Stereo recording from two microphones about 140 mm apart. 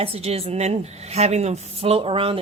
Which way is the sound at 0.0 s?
45° right (ahead or behind).